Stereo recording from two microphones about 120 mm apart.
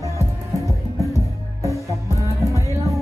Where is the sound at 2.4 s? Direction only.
25° left (ahead or behind).